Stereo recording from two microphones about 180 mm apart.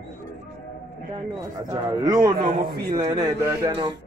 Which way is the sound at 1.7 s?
20° right (ahead or behind).